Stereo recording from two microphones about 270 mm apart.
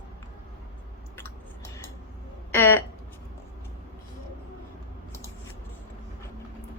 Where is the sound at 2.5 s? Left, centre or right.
Centre.